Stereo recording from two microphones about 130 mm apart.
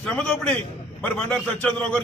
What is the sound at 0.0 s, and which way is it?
A man's voice, 5° left (ahead or behind).